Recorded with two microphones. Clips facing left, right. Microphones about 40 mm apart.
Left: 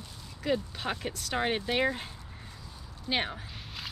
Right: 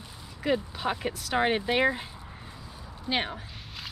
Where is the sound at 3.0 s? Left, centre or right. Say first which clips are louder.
Right 2 dB; centre.